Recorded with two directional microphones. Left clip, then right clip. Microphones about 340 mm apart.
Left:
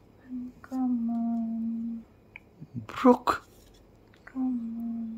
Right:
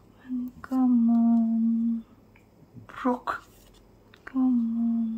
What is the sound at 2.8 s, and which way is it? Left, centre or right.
Speech, left.